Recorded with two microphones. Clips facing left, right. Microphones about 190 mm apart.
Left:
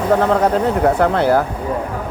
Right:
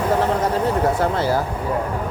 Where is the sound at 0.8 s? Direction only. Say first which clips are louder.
Left 5 dB; 60° left (ahead or behind).